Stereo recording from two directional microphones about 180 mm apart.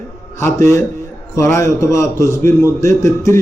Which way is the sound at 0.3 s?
15° left (ahead or behind).